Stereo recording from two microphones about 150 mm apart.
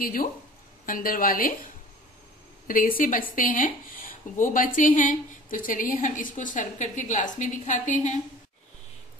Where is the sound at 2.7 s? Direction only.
70° left (ahead or behind).